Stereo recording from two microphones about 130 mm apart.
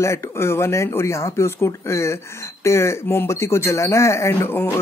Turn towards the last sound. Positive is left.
turn(degrees=15)  # may be behind; listen again after turning